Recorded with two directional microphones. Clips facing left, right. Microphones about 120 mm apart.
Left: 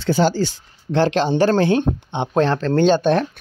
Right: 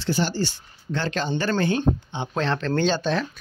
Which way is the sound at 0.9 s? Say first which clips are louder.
Left 9 dB; 80° left.